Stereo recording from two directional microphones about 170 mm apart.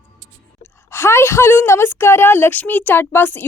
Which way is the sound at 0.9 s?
15° left (ahead or behind).